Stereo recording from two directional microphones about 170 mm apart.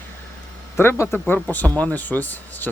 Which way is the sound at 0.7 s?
15° left (ahead or behind).